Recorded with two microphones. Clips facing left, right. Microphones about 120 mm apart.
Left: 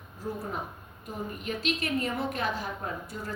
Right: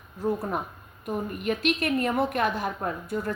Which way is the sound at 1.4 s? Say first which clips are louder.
Right 6 dB; 60° right (ahead or behind).